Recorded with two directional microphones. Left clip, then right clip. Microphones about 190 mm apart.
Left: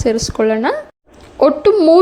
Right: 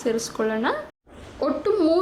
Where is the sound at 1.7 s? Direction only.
25° left (ahead or behind).